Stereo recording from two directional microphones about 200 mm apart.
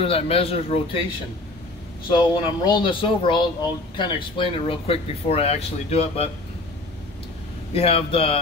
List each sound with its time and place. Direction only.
0.0 s speech: 30° left (ahead or behind)
2.0 s speech: 25° left (ahead or behind)
7.7 s speech: 30° left (ahead or behind)